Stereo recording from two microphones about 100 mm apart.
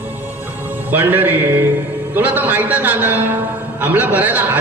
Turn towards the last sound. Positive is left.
turn(degrees=-15)  # may be behind; listen again after turning